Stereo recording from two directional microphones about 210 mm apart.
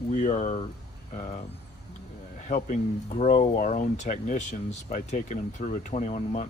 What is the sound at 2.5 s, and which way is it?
Speech, 35° left (ahead or behind).